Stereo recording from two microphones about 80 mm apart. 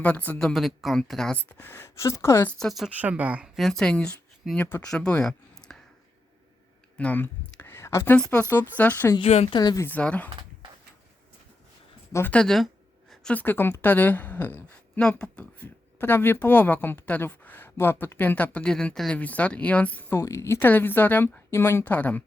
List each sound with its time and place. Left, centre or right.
0.0 s a woman's voice: centre
0.3 s speech: centre
1.5 s a woman's voice: left
2.6 s speech: centre
2.9 s speech: centre
3.4 s speech: centre
4.5 s a woman's voice: left
6.9 s a sound: centre; by 8.0 s left
8.1 s a woman's voice: centre
9.1 s speech: left
9.8 s a woman's voice: centre
12.3 s a sound: centre
13.3 s a woman's voice: left
20.1 s a woman's voice: left; by 22.2 s centre